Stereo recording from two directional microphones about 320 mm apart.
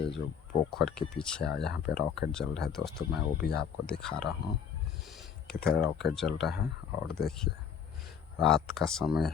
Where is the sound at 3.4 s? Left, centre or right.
Left.